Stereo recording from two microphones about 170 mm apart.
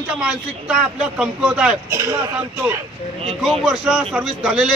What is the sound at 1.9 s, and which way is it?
Speech, 15° right (ahead or behind).